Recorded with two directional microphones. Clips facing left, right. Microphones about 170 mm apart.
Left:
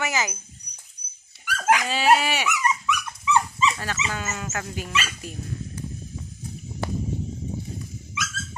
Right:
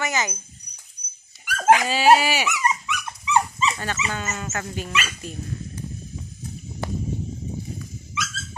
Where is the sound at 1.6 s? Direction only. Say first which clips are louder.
Right 4 dB; 25° right (ahead or behind).